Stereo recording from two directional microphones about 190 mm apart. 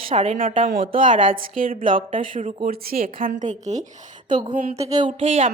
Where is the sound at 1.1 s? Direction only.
45° right (ahead or behind).